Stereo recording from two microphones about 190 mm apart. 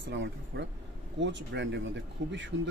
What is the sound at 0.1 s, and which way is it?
Speech, 65° right (ahead or behind).